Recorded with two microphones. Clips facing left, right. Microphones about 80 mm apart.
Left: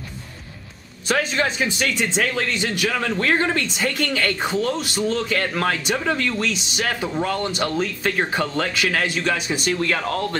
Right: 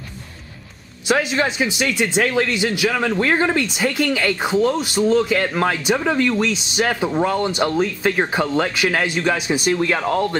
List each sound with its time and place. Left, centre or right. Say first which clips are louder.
1.0 s speech: right 3 dB; centre
2.9 s a man's voice: right 3 dB; centre
3.2 s speech: right 1 dB; centre